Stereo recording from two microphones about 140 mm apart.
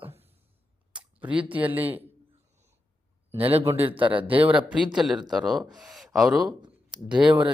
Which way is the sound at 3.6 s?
20° right (ahead or behind).